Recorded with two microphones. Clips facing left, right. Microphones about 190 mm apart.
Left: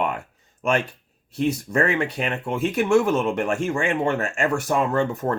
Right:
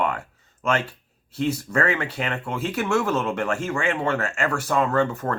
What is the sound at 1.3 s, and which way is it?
Speech, 15° left (ahead or behind).